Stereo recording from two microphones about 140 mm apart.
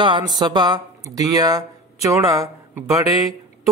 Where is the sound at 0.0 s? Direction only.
30° right (ahead or behind).